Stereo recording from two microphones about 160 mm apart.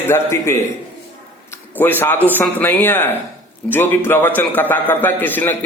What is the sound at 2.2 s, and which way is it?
A man's voice, 10° left (ahead or behind).